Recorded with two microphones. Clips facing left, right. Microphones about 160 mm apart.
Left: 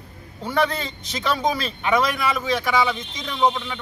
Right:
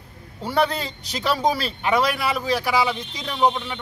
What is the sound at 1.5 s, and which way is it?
Speech, 35° right (ahead or behind).